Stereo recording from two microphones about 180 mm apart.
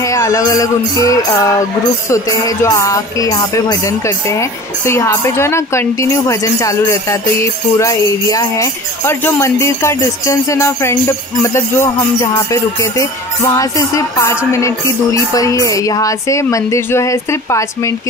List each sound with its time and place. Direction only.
0.0 s music: 15° left (ahead or behind)